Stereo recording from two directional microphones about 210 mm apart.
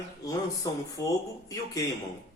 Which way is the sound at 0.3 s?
15° left (ahead or behind).